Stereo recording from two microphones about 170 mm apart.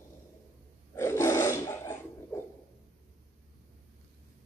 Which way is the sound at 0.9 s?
15° left (ahead or behind).